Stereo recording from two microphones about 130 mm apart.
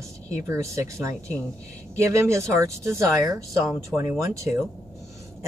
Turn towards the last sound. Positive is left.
turn(degrees=-25)  # may be behind; listen again after turning